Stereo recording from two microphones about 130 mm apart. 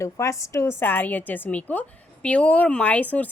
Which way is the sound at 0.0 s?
20° left (ahead or behind).